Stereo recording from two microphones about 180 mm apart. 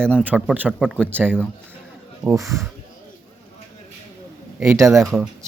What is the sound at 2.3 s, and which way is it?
Speech, 15° right (ahead or behind).